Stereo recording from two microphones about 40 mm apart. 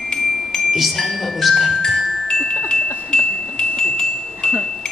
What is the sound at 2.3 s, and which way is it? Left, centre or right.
Wind chime, centre.